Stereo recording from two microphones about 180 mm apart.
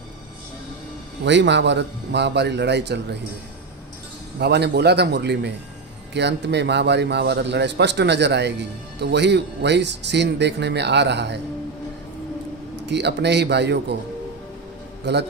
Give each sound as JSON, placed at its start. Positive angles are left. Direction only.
{"t": 1.2, "sound": "a man's voice", "side_deg": -80}
{"t": 4.4, "sound": "a man's voice", "side_deg": -65}
{"t": 12.7, "sound": "a man's voice", "side_deg": -70}